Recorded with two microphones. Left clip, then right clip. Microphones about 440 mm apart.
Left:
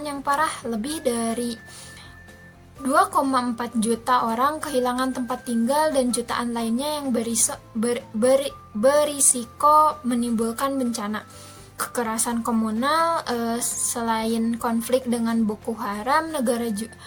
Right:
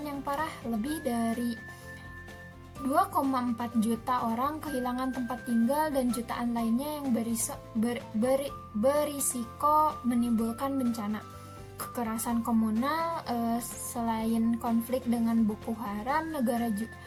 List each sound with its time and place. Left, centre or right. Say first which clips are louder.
0.0 s a woman's voice: left 10 dB; right
2.9 s a woman's voice: left 8 dB; right